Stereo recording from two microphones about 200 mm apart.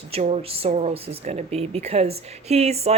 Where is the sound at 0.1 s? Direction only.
30° right (ahead or behind).